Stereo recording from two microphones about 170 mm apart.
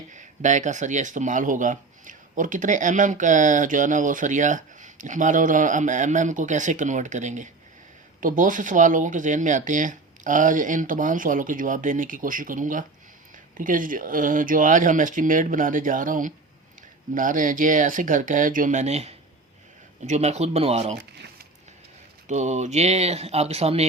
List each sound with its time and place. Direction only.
0.1 s speech: 45° right (ahead or behind)
21.0 s speech: 75° right (ahead or behind)
22.3 s speech: 45° right (ahead or behind)